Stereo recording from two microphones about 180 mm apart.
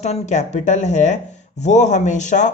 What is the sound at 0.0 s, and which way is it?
Speech, 40° left (ahead or behind).